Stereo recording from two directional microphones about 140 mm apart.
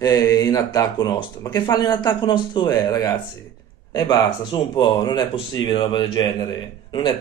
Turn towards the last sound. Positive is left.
turn(degrees=30)  # may be behind; listen again after turning